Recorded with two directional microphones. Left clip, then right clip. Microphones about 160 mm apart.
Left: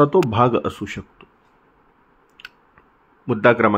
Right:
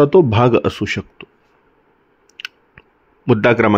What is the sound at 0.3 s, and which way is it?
Speech, 45° right (ahead or behind).